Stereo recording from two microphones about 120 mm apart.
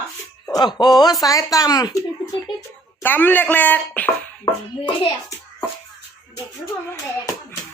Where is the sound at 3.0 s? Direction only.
15° left (ahead or behind).